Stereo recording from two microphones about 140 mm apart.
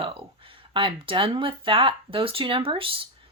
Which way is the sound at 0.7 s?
40° right (ahead or behind).